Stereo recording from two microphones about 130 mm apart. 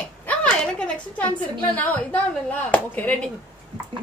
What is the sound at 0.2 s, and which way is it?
A woman's voice, 10° left (ahead or behind).